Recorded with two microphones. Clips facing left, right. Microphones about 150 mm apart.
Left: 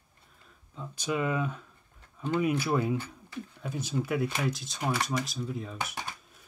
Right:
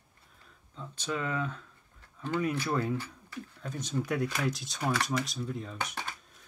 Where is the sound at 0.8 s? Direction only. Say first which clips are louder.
Left 4 dB; 10° left (ahead or behind).